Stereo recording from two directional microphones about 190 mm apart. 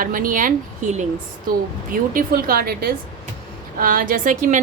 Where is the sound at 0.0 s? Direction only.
45° right (ahead or behind).